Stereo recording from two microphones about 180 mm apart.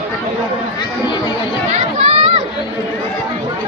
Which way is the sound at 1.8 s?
35° right (ahead or behind).